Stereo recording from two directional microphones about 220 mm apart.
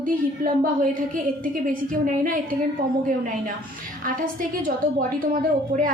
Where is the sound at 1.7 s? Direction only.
40° right (ahead or behind).